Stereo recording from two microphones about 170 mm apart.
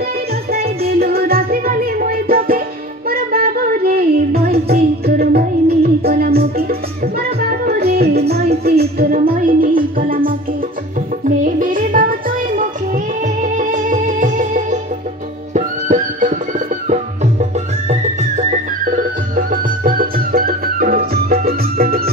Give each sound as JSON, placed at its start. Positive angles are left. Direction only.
{"t": 0.5, "sound": "music", "side_deg": -65}